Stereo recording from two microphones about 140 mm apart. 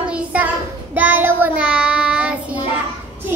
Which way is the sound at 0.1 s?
10° right (ahead or behind).